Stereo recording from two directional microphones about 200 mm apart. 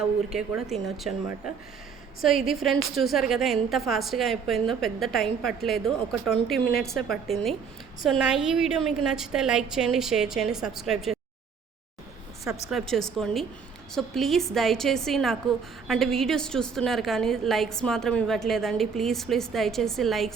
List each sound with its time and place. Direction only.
0.3 s a woman's voice: centre (ahead or behind)
2.2 s a woman's voice: centre (ahead or behind)
12.7 s a woman's voice: centre (ahead or behind)